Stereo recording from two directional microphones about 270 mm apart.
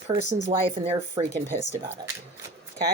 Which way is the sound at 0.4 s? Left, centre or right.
Right.